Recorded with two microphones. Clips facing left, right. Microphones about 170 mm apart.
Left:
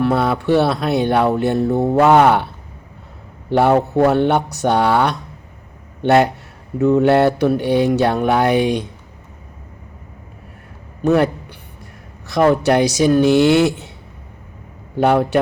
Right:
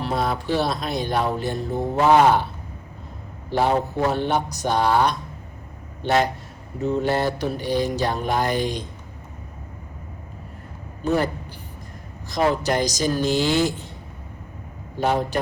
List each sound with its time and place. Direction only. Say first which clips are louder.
0.0 s speech: left 7 dB; 65° left (ahead or behind)
3.5 s speech: left 7 dB; 65° left (ahead or behind)
11.0 s a man's voice: left 7 dB; 65° left (ahead or behind)
12.3 s speech: left 7 dB; 65° left (ahead or behind)
14.9 s speech: left 7 dB; 65° left (ahead or behind)